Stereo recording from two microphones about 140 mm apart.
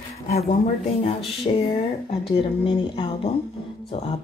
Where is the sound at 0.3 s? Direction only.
50° left (ahead or behind).